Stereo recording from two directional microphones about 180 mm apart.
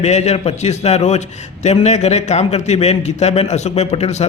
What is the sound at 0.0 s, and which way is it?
A man's voice, 40° left (ahead or behind).